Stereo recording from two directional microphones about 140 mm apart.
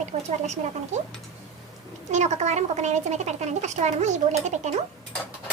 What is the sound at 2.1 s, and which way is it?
Speech, 55° right (ahead or behind).